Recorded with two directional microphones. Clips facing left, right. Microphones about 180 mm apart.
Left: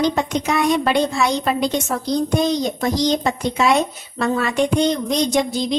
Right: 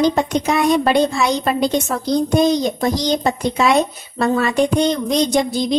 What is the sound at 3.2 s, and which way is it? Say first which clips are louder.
A woman's voice: right 2 dB; 35° right (ahead or behind).